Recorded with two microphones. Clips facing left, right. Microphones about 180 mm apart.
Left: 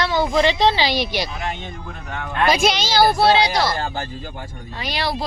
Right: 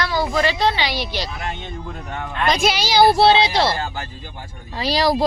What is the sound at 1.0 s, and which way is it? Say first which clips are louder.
Speech: left 3 dB; 15° left (ahead or behind).